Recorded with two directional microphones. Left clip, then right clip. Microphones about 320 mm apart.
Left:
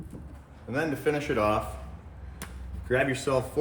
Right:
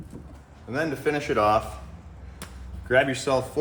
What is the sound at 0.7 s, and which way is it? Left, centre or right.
Speech, right.